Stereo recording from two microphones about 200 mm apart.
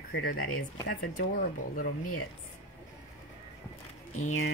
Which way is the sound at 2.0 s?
90° left.